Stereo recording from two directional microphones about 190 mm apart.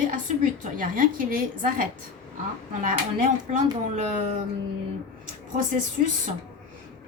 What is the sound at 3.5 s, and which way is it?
Speech, 40° right (ahead or behind).